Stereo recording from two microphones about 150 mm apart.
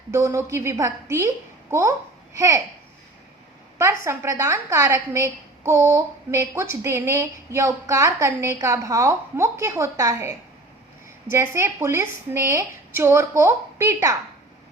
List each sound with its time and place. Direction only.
0.1 s a woman's voice: 20° right (ahead or behind)
3.8 s a woman's voice: 20° right (ahead or behind)